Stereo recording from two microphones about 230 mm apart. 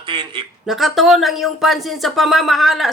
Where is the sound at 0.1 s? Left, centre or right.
Right.